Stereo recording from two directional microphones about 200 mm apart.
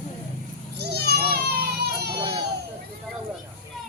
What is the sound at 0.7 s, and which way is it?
Baby cry, 55° right (ahead or behind).